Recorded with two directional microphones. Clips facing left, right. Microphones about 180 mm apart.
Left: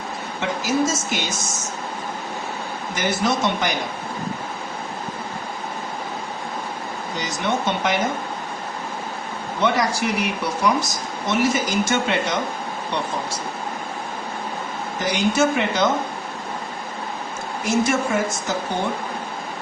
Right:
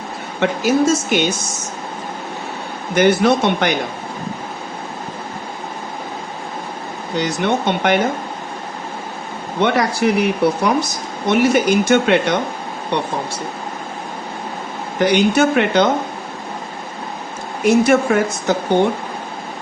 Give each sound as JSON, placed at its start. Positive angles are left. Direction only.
{"t": 0.3, "sound": "speech", "side_deg": -65}
{"t": 2.9, "sound": "speech", "side_deg": -65}
{"t": 7.2, "sound": "speech", "side_deg": -60}
{"t": 9.6, "sound": "speech", "side_deg": -60}
{"t": 14.9, "sound": "speech", "side_deg": -65}
{"t": 17.7, "sound": "speech", "side_deg": -60}